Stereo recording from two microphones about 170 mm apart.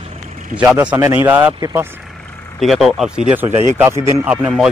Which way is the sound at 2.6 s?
Centre (ahead or behind).